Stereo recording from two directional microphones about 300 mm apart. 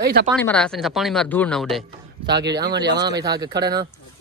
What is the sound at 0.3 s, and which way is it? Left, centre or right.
Speech, centre.